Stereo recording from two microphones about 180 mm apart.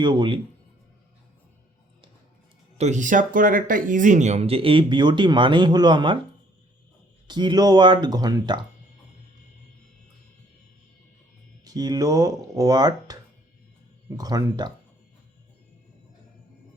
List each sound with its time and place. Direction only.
0.0 s speech: 25° right (ahead or behind)
2.7 s speech: 40° right (ahead or behind)
7.3 s speech: 25° right (ahead or behind)
11.6 s speech: 20° right (ahead or behind)
14.2 s speech: 20° right (ahead or behind)